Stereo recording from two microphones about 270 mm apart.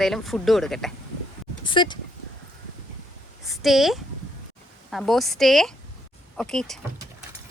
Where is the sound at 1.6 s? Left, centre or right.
Centre.